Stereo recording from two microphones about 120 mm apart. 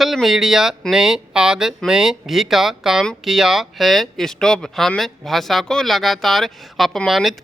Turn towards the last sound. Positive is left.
turn(degrees=0)  # may be behind; listen again after turning